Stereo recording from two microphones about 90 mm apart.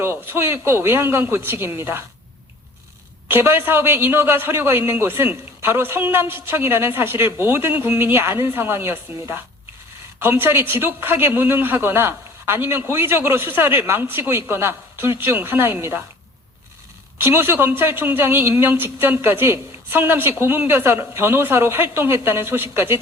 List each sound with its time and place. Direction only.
0.0 s a man's voice: 25° right (ahead or behind)
3.2 s a man's voice: 25° right (ahead or behind)
17.2 s a man's voice: 25° right (ahead or behind)